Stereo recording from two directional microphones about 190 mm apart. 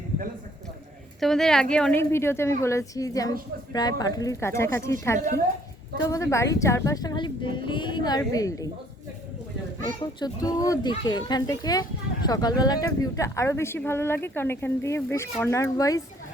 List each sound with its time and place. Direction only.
1.2 s speech: centre (ahead or behind); by 8.7 s 20° left (ahead or behind)
10.0 s speech: 20° left (ahead or behind)